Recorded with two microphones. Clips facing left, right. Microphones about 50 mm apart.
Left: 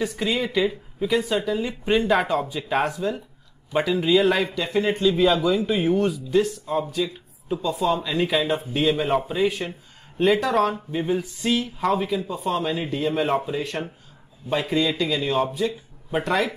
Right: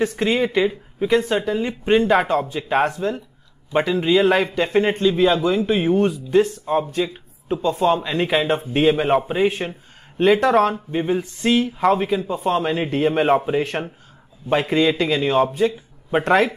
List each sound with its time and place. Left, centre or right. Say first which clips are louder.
0.0 s speech: right 5 dB; right
2.0 s speech: right 4 dB; centre
2.2 s speech: right 3 dB; right
4.0 s a sound: right 3 dB; right
4.6 s speech: right 4 dB; right
5.0 s a sound: left 1 dB; right
5.9 s speech: right 3 dB; right
10.7 s a sound: right 3 dB; right
11.9 s speech: right 4 dB; right